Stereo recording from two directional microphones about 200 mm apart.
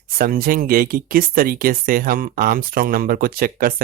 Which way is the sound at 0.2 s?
45° right (ahead or behind).